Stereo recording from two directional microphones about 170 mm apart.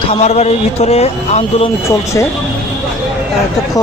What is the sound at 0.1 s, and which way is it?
Speech, 40° left (ahead or behind).